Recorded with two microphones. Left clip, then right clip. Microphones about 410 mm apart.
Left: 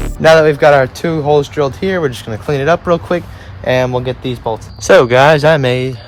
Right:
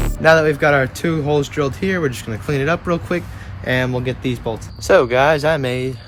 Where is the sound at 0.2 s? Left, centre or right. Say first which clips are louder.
Left 6 dB; left.